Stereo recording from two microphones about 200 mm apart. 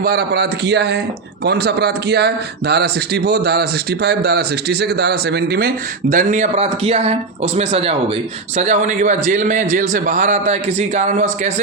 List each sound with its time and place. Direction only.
0.0 s a man's voice: 50° right (ahead or behind); by 11.5 s 35° right (ahead or behind)